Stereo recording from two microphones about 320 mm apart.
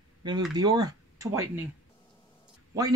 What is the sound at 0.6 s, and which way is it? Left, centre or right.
Speech, centre.